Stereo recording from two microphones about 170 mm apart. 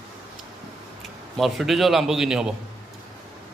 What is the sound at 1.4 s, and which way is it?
A man's voice, centre (ahead or behind).